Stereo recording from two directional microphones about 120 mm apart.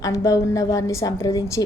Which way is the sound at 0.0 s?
30° left (ahead or behind).